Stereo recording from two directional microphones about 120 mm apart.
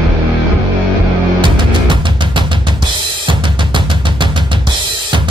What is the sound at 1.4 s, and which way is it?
Drum kit, 40° right (ahead or behind).